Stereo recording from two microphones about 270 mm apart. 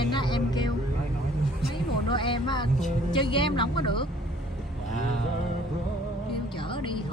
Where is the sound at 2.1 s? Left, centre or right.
Centre.